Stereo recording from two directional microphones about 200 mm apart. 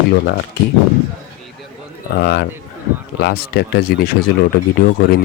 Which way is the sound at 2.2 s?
55° left (ahead or behind).